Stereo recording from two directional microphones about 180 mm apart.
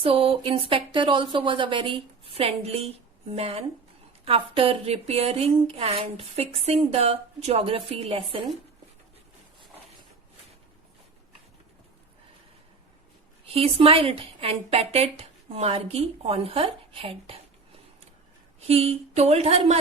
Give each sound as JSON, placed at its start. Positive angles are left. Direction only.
{"t": 0.0, "sound": "speech", "side_deg": -30}
{"t": 13.4, "sound": "speech", "side_deg": -30}
{"t": 18.7, "sound": "speech", "side_deg": -35}